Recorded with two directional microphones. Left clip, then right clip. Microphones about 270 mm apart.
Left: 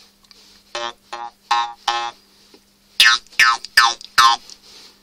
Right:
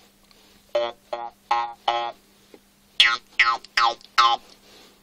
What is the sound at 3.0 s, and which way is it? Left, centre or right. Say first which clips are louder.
Music: left 5 dB; centre.